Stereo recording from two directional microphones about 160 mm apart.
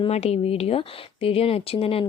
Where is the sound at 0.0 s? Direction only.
40° left (ahead or behind).